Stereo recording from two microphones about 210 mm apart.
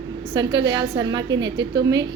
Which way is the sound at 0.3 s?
20° right (ahead or behind).